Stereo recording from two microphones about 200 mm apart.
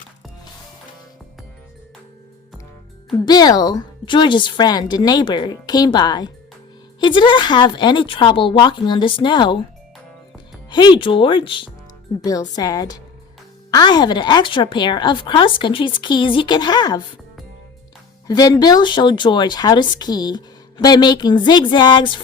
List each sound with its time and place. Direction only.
3.1 s speech: 20° left (ahead or behind)
10.7 s speech: 20° left (ahead or behind)
18.3 s speech: 20° left (ahead or behind)